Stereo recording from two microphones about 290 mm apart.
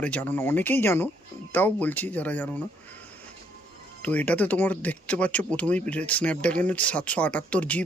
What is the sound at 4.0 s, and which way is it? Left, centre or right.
Speech, centre.